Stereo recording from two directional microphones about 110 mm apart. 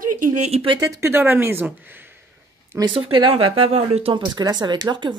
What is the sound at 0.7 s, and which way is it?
Speech, 35° right (ahead or behind).